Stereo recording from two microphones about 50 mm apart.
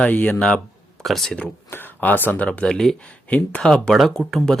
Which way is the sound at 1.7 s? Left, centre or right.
Left.